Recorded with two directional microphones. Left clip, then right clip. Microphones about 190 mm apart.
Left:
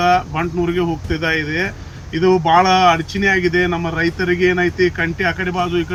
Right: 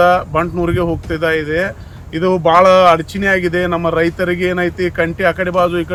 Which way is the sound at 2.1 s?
30° right (ahead or behind).